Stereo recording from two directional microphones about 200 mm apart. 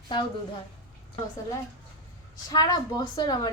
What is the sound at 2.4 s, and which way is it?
A woman's voice, 20° left (ahead or behind).